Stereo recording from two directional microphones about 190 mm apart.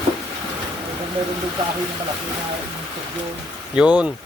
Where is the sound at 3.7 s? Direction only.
5° right (ahead or behind).